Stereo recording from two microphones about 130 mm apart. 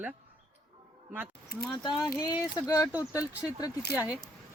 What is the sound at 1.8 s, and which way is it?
Speech, 30° left (ahead or behind).